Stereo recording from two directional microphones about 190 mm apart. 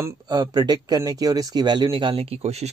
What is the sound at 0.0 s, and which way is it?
Speech, 20° right (ahead or behind).